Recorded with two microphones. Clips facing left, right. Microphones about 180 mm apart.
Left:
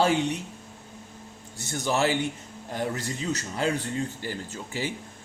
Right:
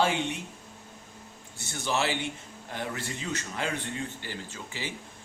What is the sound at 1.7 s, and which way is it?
Speech, 45° left (ahead or behind).